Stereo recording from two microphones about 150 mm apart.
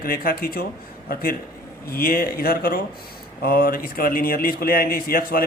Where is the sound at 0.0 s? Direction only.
75° left (ahead or behind).